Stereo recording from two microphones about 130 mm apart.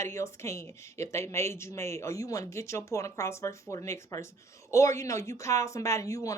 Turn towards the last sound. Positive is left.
turn(degrees=25)  # may be behind; listen again after turning